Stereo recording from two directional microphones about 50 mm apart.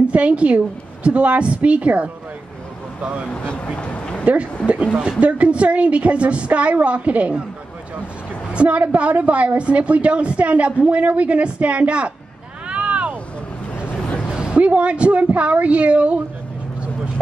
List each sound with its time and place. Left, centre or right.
0.1 s a woman's voice: right
3.5 s speech: left
4.2 s a woman's voice: right
8.5 s a woman's voice: right
12.6 s vehicle: right
14.3 s a sound: centre
14.6 s a woman's voice: right